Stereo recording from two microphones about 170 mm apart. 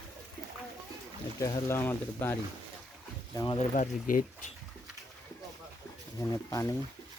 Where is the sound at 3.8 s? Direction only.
50° left (ahead or behind).